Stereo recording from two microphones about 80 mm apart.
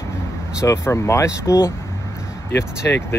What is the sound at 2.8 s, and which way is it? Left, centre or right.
Speech, left.